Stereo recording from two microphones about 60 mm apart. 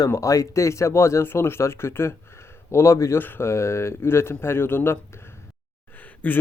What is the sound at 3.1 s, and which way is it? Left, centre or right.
Speech, left.